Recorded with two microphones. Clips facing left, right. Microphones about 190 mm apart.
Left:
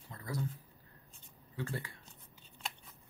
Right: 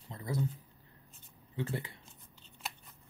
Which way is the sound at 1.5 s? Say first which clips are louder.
Right 3 dB; 20° right (ahead or behind).